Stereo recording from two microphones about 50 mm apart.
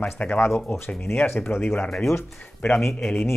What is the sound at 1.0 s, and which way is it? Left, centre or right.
Speech, left.